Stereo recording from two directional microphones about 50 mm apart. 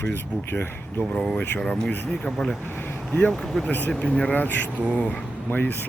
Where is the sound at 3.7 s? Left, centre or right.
Left.